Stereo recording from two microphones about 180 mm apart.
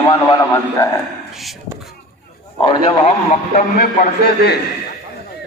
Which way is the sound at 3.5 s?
60° left (ahead or behind).